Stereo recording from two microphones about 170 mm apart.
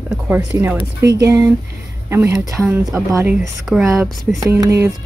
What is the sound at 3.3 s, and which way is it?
Speech, 5° right (ahead or behind).